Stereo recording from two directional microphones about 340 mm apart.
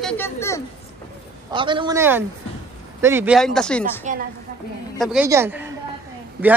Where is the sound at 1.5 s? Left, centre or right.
Centre.